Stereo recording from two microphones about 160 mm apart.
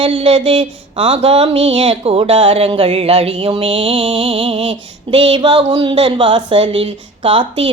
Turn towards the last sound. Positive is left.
turn(degrees=-30)  # may be behind; listen again after turning